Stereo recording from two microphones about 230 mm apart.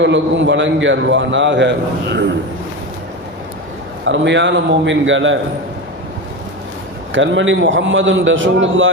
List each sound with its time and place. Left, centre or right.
0.0 s a man's voice: right
4.0 s a man's voice: right
7.1 s a man's voice: right